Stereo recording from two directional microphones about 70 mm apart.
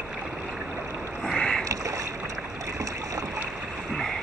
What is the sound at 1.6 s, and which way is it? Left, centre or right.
Boat, right.